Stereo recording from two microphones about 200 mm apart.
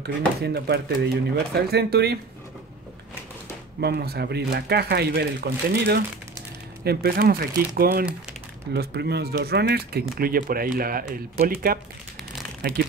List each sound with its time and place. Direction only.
0.4 s speech: 55° right (ahead or behind)
3.8 s speech: 55° right (ahead or behind)